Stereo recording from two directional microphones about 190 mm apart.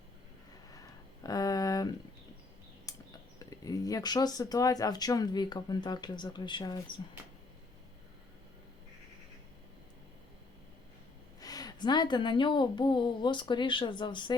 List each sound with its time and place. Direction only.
0.7 s a sound: 20° left (ahead or behind)
3.3 s speech: 20° left (ahead or behind)
11.3 s speech: 20° left (ahead or behind)